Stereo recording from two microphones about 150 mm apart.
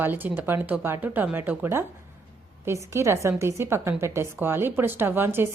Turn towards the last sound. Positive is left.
turn(degrees=-15)  # may be behind; listen again after turning